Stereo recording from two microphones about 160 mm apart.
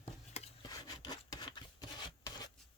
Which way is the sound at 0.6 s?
25° left (ahead or behind).